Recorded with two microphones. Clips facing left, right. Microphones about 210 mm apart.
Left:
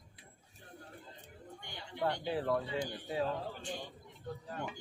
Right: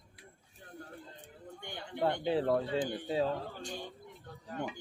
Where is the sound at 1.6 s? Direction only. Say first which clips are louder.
Right 8 dB; 55° right (ahead or behind).